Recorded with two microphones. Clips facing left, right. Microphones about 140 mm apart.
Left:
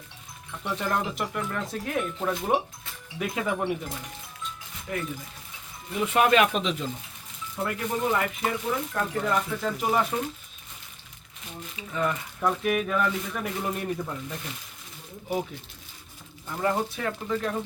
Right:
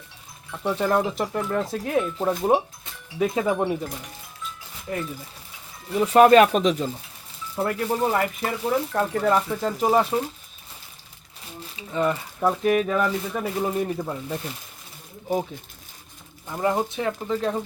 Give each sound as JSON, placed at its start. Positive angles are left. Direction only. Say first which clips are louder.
{"t": 0.6, "sound": "speech", "louder": "right 6 dB", "side_deg": -35}
{"t": 4.9, "sound": "speech", "louder": "right 2 dB", "side_deg": -30}
{"t": 11.6, "sound": "speech", "louder": "right 4 dB", "side_deg": -30}
{"t": 16.5, "sound": "speech", "louder": "right 3 dB", "side_deg": -20}